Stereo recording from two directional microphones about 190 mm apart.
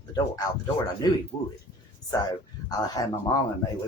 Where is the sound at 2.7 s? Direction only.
20° left (ahead or behind).